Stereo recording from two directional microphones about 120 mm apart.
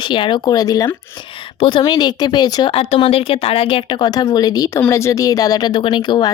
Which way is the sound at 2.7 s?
50° left (ahead or behind).